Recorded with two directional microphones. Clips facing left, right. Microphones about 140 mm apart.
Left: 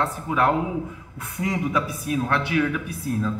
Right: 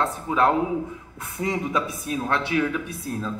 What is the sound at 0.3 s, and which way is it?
Speech, 25° right (ahead or behind).